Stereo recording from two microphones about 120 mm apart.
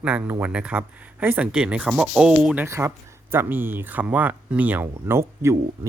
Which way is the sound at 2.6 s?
25° right (ahead or behind).